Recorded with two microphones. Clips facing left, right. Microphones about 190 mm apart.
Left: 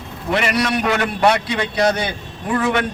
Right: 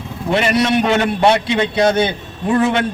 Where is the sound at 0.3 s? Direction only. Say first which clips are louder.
Right 4 dB; 25° right (ahead or behind).